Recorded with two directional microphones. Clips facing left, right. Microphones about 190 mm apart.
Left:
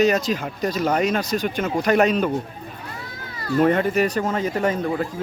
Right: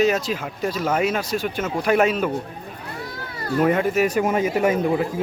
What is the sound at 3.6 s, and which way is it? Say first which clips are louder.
Speech: even; 5° right (ahead or behind).